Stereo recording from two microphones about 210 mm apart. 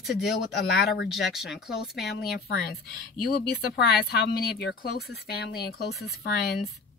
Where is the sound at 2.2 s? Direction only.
50° left (ahead or behind).